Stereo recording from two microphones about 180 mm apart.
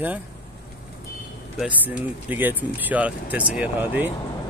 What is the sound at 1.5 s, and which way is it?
A man's voice, 10° right (ahead or behind).